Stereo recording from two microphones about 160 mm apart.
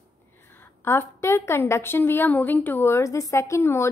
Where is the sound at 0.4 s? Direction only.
15° left (ahead or behind).